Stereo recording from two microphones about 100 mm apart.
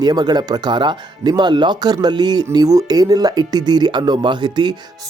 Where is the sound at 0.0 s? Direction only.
45° right (ahead or behind).